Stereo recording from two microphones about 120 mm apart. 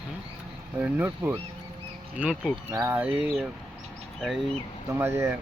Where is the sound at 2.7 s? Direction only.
20° right (ahead or behind).